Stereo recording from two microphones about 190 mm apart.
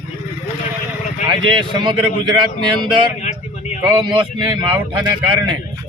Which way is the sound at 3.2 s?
40° left (ahead or behind).